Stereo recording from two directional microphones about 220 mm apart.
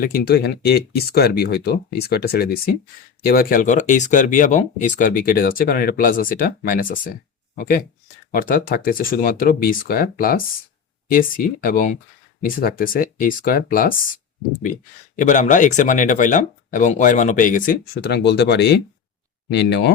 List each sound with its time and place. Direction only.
0.0 s speech: 40° left (ahead or behind)
15.1 s speech: 35° left (ahead or behind)